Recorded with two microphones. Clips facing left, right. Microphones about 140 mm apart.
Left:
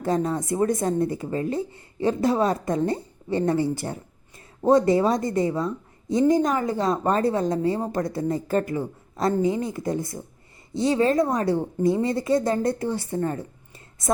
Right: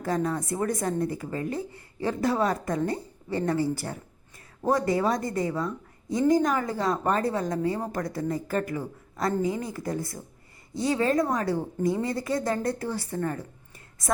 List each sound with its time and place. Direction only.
0.0 s a woman's voice: 25° left (ahead or behind)